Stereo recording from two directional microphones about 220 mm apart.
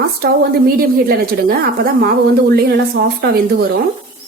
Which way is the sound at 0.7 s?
45° right (ahead or behind).